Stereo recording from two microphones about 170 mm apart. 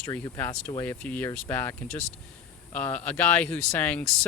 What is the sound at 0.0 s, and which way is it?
Speech, 15° left (ahead or behind).